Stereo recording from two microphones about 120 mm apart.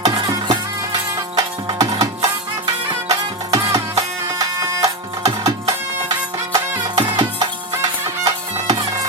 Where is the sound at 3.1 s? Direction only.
30° right (ahead or behind).